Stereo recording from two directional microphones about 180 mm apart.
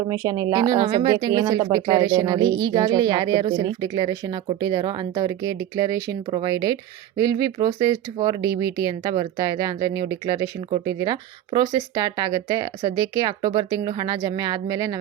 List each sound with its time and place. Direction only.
0.1 s speech: 20° right (ahead or behind)